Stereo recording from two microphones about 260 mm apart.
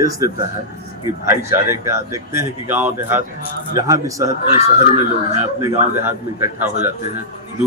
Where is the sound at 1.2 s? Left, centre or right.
Centre.